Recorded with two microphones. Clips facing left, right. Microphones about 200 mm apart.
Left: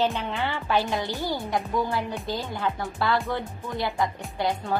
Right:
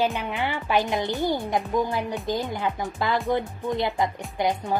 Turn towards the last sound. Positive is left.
turn(degrees=-15)  # may be behind; listen again after turning